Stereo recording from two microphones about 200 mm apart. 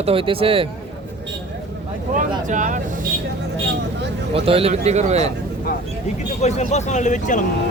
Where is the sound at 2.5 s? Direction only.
40° right (ahead or behind).